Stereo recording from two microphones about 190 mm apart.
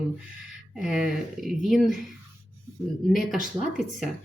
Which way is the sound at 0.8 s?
5° right (ahead or behind).